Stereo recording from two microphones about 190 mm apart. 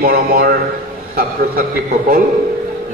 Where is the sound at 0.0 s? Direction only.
50° right (ahead or behind).